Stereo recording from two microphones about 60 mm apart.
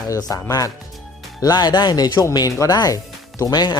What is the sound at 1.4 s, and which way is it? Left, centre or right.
Speech, left.